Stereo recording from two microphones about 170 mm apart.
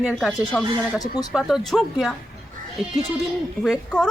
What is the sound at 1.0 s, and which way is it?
Speech, 20° left (ahead or behind).